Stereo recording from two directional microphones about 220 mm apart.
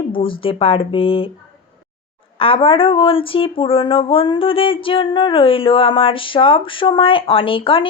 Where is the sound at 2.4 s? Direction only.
25° left (ahead or behind).